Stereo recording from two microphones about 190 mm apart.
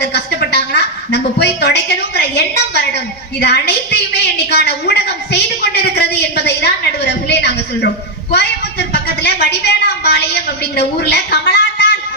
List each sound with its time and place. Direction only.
0.0 s a woman's voice: 60° left (ahead or behind)